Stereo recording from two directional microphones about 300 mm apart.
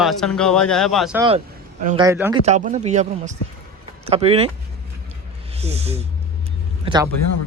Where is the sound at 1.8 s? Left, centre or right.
Centre.